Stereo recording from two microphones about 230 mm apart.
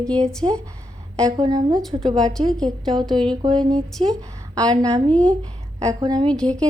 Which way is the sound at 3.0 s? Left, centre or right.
Centre.